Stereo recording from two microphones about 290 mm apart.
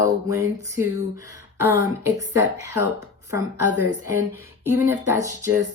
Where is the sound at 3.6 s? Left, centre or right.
Left.